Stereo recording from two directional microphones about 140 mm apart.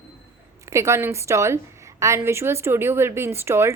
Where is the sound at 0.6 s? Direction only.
20° right (ahead or behind).